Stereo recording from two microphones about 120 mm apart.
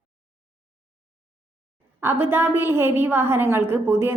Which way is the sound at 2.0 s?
20° right (ahead or behind).